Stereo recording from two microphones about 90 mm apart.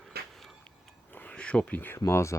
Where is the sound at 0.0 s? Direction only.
Centre (ahead or behind).